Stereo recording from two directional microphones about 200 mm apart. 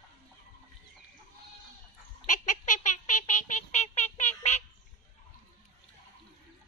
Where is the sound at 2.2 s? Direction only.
40° left (ahead or behind).